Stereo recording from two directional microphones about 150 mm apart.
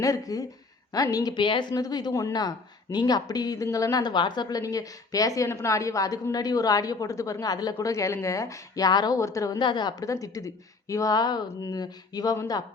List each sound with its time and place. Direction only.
0.0 s speech: 25° left (ahead or behind)